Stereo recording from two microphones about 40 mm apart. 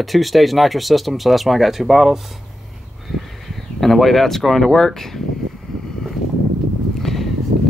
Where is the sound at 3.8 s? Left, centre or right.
Centre.